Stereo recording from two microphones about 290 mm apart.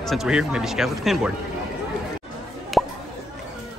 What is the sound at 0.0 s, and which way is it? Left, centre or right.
Speech, centre.